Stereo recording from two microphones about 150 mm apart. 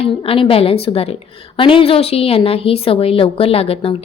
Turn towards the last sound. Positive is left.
turn(degrees=40)  # may be behind; listen again after turning